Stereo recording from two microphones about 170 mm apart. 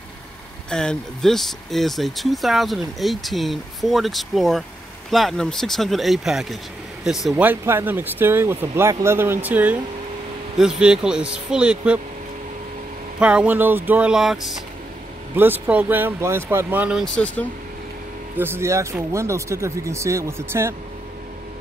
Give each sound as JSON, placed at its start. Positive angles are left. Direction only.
{"t": 0.7, "sound": "speech", "side_deg": 5}
{"t": 13.2, "sound": "speech", "side_deg": -5}
{"t": 15.3, "sound": "speech", "side_deg": -10}
{"t": 17.0, "sound": "speech", "side_deg": 5}
{"t": 18.4, "sound": "speech", "side_deg": -15}